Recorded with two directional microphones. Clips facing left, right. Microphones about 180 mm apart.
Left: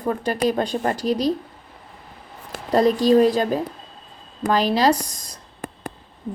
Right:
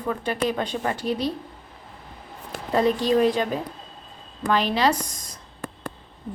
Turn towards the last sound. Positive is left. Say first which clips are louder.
# left 5 dB
turn(degrees=35)  # may be behind; listen again after turning